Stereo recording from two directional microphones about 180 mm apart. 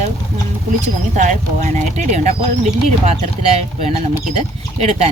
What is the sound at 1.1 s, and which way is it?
Speech, 45° right (ahead or behind).